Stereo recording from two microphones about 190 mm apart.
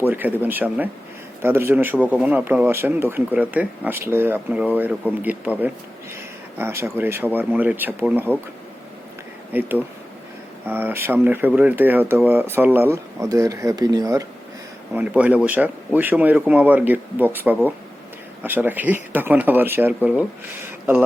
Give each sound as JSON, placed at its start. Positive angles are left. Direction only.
{"t": 0.0, "sound": "speech", "side_deg": -10}
{"t": 9.5, "sound": "speech", "side_deg": -10}
{"t": 14.9, "sound": "speech", "side_deg": -10}